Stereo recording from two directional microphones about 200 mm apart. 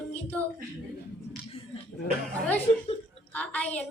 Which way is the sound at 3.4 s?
5° left (ahead or behind).